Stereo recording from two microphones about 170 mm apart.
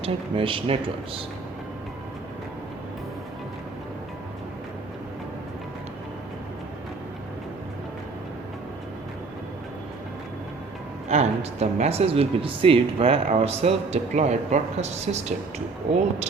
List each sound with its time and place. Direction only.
0.0 s speech: 30° right (ahead or behind)
11.1 s speech: 40° right (ahead or behind)